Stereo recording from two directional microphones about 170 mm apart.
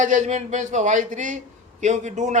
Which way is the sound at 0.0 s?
45° right (ahead or behind).